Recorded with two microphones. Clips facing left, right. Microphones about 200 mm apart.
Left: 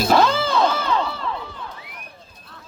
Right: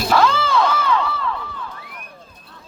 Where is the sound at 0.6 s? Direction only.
35° left (ahead or behind).